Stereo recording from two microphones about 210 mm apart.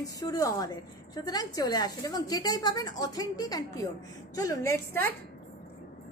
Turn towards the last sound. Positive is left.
turn(degrees=10)  # may be behind; listen again after turning